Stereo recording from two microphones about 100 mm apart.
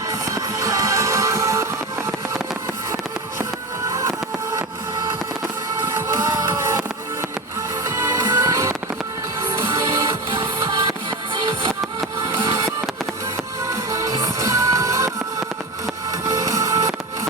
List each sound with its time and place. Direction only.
0.1 s music: 35° right (ahead or behind)
6.1 s music: 30° right (ahead or behind)
7.9 s music: 30° right (ahead or behind)
12.3 s music: 30° right (ahead or behind)